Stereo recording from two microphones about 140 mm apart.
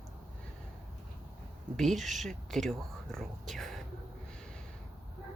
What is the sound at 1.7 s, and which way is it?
Speech, centre (ahead or behind).